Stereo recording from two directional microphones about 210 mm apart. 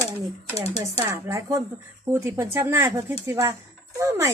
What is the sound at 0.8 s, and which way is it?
Speech, 10° right (ahead or behind).